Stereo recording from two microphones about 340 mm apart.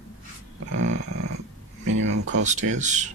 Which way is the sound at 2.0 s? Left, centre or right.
Right.